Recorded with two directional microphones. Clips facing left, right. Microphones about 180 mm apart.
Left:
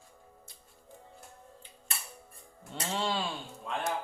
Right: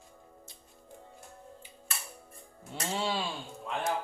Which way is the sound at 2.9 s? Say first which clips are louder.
Even; 5° right (ahead or behind).